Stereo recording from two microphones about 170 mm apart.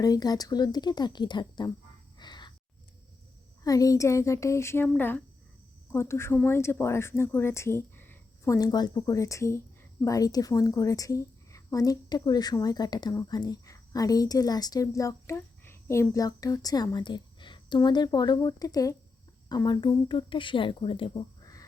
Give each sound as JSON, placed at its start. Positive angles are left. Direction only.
{"t": 0.0, "sound": "a woman's voice", "side_deg": 20}
{"t": 2.1, "sound": "a sound", "side_deg": 25}
{"t": 3.6, "sound": "a woman's voice", "side_deg": 20}